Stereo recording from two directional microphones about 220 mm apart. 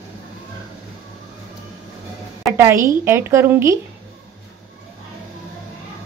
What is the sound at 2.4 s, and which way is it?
A woman's voice, 10° right (ahead or behind).